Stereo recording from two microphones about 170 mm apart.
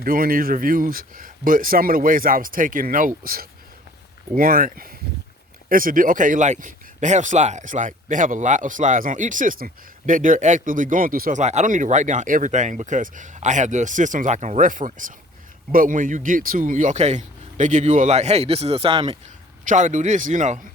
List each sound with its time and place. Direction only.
0.0 s speech: 60° right (ahead or behind); by 19.1 s 35° right (ahead or behind)
19.6 s speech: 45° right (ahead or behind)